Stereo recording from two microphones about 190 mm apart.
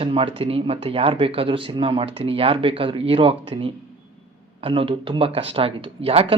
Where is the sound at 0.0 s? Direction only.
25° right (ahead or behind).